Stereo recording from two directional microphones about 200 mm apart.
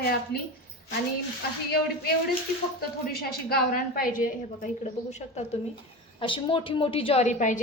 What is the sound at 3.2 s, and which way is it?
A woman's voice, 50° left (ahead or behind).